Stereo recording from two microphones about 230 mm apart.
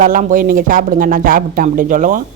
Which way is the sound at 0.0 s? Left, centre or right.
Right.